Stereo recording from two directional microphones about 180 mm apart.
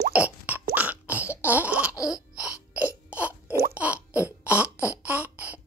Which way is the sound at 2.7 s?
10° right (ahead or behind).